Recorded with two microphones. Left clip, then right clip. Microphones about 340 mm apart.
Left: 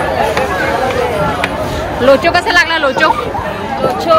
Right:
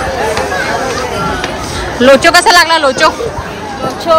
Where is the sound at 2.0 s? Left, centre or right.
Right.